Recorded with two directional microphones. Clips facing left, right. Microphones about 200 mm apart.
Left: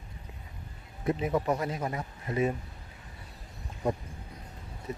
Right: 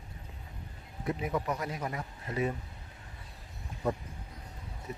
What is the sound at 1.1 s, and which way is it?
Speech, 25° left (ahead or behind).